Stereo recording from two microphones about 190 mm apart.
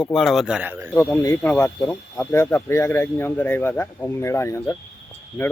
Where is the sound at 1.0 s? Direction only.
15° left (ahead or behind).